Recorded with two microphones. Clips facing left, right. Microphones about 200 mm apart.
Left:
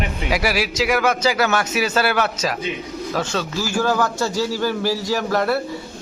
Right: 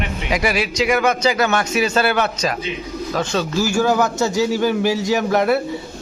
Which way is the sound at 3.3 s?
15° right (ahead or behind).